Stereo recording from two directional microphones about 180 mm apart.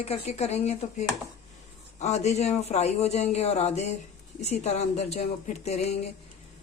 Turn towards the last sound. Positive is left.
turn(degrees=40)  # may be behind; listen again after turning